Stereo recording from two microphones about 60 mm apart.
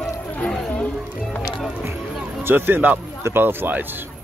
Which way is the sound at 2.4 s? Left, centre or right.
Right.